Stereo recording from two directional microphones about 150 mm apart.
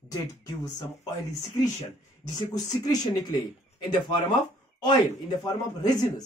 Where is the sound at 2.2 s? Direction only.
25° left (ahead or behind).